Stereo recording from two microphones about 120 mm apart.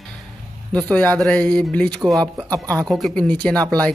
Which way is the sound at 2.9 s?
Centre (ahead or behind).